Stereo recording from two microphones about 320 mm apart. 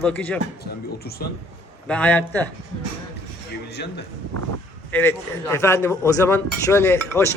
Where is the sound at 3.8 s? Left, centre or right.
Left.